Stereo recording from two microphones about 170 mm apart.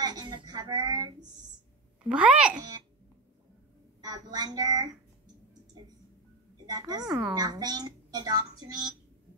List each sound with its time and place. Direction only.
0.0 s a woman's voice: 25° right (ahead or behind)
2.0 s a child's voice: 5° right (ahead or behind)
4.0 s a woman's voice: 25° right (ahead or behind)
6.6 s a woman's voice: 25° right (ahead or behind)
7.1 s a woman's voice: 5° right (ahead or behind)
7.3 s a woman's voice: 25° right (ahead or behind)